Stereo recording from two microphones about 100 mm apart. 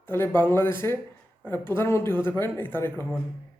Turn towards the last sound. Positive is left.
turn(degrees=20)  # may be behind; listen again after turning